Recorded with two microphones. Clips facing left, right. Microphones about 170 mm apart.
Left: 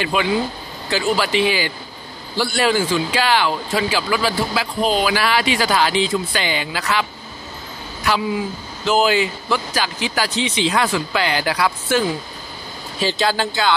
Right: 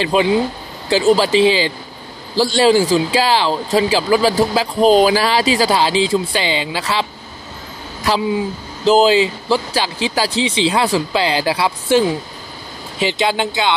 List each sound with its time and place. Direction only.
0.0 s speech: 30° right (ahead or behind)
13.0 s speech: 20° right (ahead or behind)